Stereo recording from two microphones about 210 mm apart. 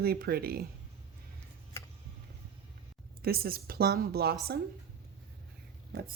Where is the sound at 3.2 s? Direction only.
45° right (ahead or behind).